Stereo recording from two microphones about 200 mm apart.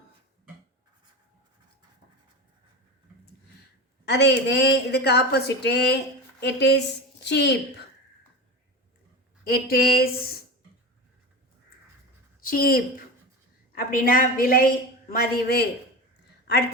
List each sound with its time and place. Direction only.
4.0 s speech: 55° left (ahead or behind)
9.5 s a woman's voice: 50° left (ahead or behind)
12.4 s a woman's voice: 45° left (ahead or behind)